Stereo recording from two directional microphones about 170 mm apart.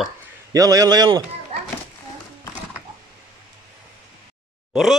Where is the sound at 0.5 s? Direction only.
20° right (ahead or behind).